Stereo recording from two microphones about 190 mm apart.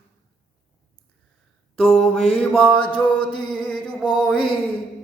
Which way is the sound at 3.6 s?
5° left (ahead or behind).